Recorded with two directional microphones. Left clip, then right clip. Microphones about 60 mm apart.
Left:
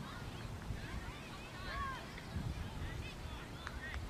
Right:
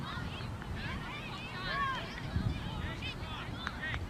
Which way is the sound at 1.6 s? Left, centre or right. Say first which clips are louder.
Right 9 dB; centre.